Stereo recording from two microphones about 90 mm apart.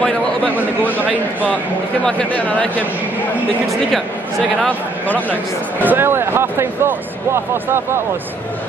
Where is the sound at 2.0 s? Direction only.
10° left (ahead or behind).